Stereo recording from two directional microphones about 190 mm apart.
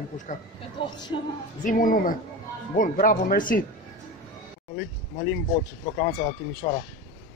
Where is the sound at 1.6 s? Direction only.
45° left (ahead or behind).